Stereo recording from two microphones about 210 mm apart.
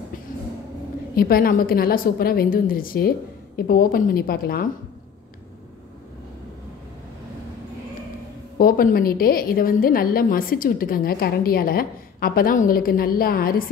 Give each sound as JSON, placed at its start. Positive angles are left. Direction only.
{"t": 1.1, "sound": "a woman's voice", "side_deg": 45}
{"t": 8.5, "sound": "a woman's voice", "side_deg": 45}